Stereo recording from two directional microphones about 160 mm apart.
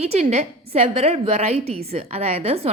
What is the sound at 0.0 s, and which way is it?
A woman's voice, 40° right (ahead or behind).